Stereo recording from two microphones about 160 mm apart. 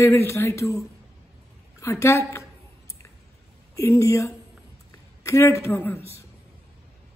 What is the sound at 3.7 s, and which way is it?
Speech, 20° left (ahead or behind).